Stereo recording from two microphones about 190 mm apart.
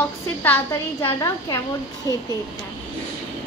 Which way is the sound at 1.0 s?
20° left (ahead or behind).